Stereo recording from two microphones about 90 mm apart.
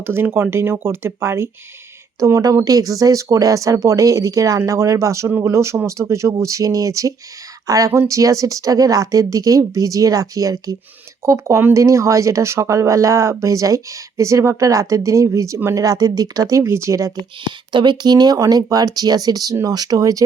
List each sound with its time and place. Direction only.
0.0 s speech: 25° right (ahead or behind)
17.7 s speech: 60° right (ahead or behind); by 20.2 s 40° right (ahead or behind)